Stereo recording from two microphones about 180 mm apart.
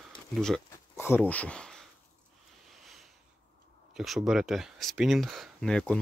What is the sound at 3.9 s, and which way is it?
Speech, centre (ahead or behind).